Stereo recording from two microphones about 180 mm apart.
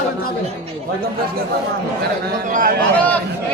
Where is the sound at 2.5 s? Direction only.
50° right (ahead or behind).